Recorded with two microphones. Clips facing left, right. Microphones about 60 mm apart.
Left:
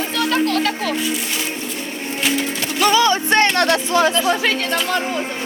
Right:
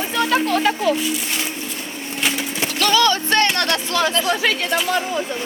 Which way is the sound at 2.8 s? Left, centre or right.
Centre.